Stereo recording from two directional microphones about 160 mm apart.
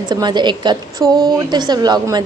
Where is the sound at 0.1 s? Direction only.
25° right (ahead or behind).